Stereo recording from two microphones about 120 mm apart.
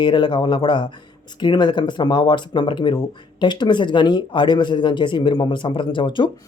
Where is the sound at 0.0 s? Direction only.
40° left (ahead or behind).